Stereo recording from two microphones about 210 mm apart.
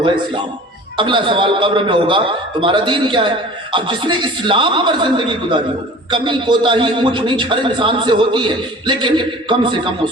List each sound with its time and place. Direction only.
0.9 s a man's voice: 20° right (ahead or behind)